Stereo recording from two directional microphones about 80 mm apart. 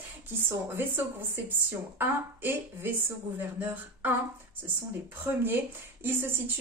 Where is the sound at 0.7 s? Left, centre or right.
Right.